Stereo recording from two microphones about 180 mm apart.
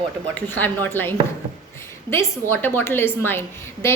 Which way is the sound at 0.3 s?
10° left (ahead or behind).